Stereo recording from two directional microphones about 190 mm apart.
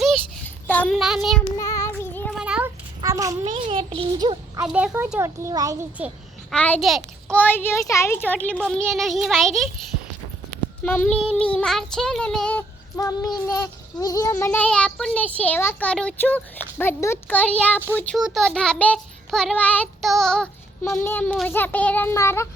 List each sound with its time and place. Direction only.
0.7 s child singing: 5° left (ahead or behind)
1.5 s child singing: 15° left (ahead or behind)
2.4 s a sound: 5° right (ahead or behind)
3.0 s a sound: 15° right (ahead or behind)
3.4 s a child's voice: 30° right (ahead or behind)
4.6 s a child's voice: 5° right (ahead or behind)
6.5 s a child's voice: 5° left (ahead or behind)
10.8 s child singing: 10° left (ahead or behind)